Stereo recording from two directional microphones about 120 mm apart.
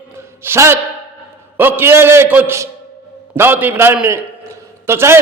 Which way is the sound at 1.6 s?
15° right (ahead or behind).